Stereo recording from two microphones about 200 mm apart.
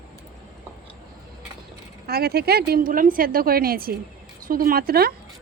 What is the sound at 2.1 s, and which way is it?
A woman's voice, 50° right (ahead or behind).